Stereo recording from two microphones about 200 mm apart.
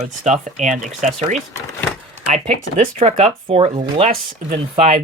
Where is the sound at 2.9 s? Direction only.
35° right (ahead or behind).